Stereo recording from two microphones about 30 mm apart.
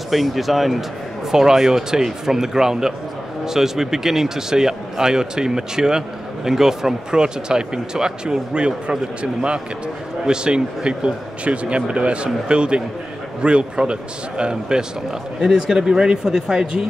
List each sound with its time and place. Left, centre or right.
0.1 s speech: centre
1.3 s speech: centre
7.2 s speech: right